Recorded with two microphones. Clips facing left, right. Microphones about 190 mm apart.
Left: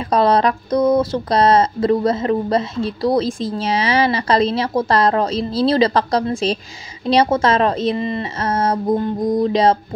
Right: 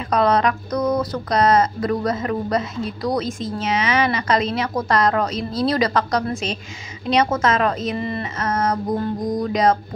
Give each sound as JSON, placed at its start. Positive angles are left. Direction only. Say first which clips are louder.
{"t": 0.1, "sound": "speech", "louder": "left 3 dB", "side_deg": 30}
{"t": 8.0, "sound": "music", "louder": "left 3 dB", "side_deg": 20}
{"t": 8.4, "sound": "music", "louder": "left 2 dB", "side_deg": 30}